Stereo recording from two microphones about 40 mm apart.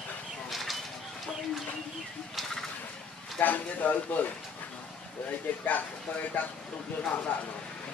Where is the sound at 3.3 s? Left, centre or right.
Left.